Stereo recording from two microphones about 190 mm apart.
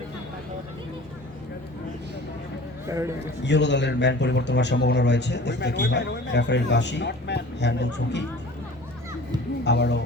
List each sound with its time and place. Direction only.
3.4 s speech: 65° left (ahead or behind)
9.6 s speech: 65° left (ahead or behind)